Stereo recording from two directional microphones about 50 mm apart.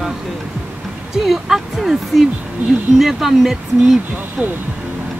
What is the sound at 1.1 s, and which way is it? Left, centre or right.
Speech, centre.